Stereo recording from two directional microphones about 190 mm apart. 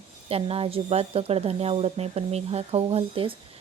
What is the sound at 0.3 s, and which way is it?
Speech, 30° right (ahead or behind).